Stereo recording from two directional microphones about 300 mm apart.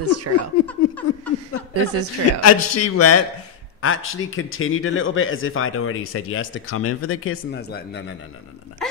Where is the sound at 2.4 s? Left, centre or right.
Left.